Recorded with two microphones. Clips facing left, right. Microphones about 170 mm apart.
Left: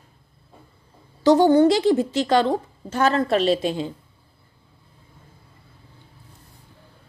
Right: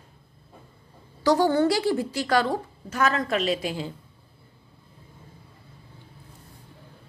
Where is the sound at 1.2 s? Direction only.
20° left (ahead or behind).